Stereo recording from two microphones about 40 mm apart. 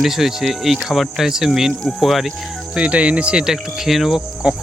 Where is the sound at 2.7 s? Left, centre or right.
Right.